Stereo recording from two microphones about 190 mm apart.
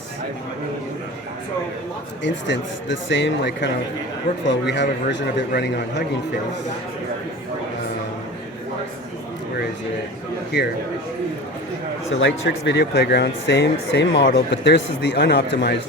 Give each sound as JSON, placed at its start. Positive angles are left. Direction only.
{"t": 2.2, "sound": "speech", "side_deg": 70}
{"t": 12.1, "sound": "speech", "side_deg": 80}